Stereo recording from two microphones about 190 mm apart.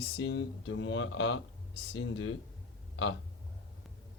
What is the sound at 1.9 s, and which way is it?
Speech, 85° left.